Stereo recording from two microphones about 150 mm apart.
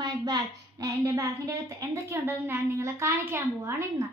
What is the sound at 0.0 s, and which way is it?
A woman's voice, 25° right (ahead or behind).